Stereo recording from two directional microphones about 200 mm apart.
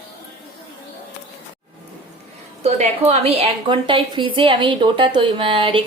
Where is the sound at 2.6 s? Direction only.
30° right (ahead or behind).